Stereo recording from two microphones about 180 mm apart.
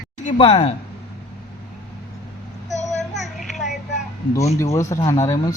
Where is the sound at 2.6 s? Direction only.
40° left (ahead or behind).